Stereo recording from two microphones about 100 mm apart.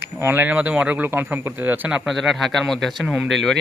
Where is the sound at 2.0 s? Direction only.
Centre (ahead or behind).